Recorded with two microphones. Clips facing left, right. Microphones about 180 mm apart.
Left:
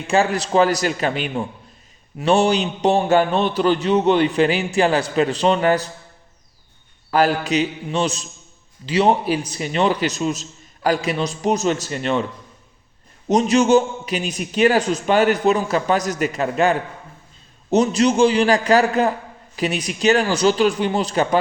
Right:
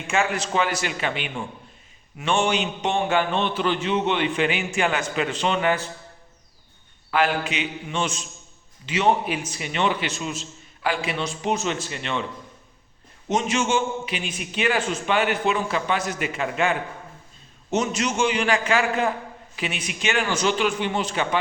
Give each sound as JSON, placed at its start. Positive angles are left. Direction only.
{"t": 0.1, "sound": "a man's voice", "side_deg": 35}
{"t": 7.1, "sound": "a man's voice", "side_deg": 40}
{"t": 13.2, "sound": "a man's voice", "side_deg": 35}